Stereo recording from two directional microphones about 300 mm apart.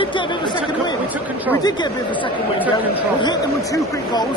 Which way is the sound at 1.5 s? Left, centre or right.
Centre.